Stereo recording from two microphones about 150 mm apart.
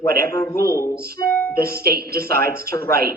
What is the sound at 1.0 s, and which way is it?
Speech, 90° right.